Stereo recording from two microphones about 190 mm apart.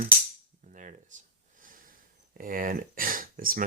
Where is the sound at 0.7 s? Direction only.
40° right (ahead or behind).